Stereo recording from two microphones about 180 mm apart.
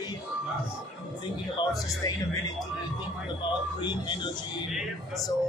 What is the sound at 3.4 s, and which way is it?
Speech, 25° left (ahead or behind).